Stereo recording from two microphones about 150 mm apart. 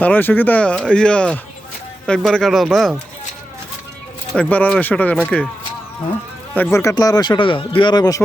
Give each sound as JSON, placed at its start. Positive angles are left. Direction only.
{"t": 0.0, "sound": "speech", "side_deg": 10}
{"t": 4.4, "sound": "speech", "side_deg": 10}
{"t": 6.6, "sound": "speech", "side_deg": 20}